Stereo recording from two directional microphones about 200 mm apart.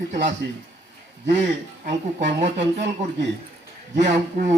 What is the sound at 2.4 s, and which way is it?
Speech, 60° right (ahead or behind).